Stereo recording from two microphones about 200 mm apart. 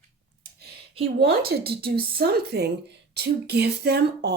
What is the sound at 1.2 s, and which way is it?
Speech, 50° right (ahead or behind).